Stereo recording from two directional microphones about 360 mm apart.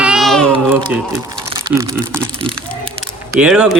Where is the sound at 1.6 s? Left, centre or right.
Centre.